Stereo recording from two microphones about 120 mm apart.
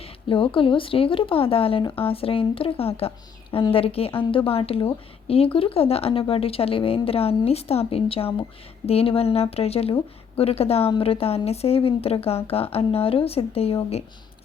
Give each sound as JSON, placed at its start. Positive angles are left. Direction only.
{"t": 0.0, "sound": "speech", "side_deg": 45}